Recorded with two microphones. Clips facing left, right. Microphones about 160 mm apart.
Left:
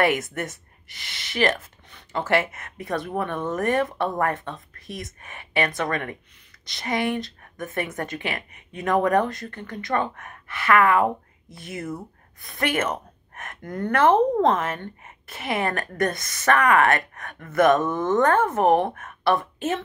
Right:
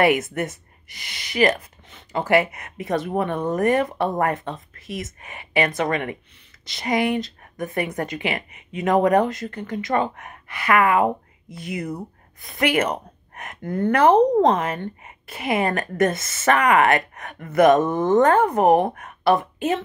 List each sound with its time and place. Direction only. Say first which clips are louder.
0.0 s a woman's voice: right 4 dB; 20° right (ahead or behind)
4.7 s speech: right 4 dB; centre (ahead or behind)
5.2 s a woman's voice: right 3 dB; 20° right (ahead or behind)
11.4 s speech: right 4 dB; centre (ahead or behind)
12.8 s speech: right 2 dB; 20° right (ahead or behind)
16.0 s speech: right 5 dB; 5° right (ahead or behind)
16.3 s speech: right 1 dB; 20° right (ahead or behind)